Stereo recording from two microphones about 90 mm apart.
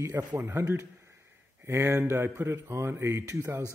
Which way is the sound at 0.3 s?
25° right (ahead or behind).